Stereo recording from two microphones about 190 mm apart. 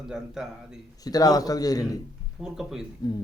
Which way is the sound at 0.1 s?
5° right (ahead or behind).